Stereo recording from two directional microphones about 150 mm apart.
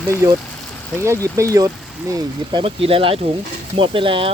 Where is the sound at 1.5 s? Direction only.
25° right (ahead or behind).